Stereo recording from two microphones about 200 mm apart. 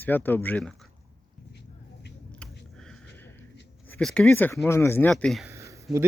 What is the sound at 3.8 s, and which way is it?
Speech, 5° left (ahead or behind).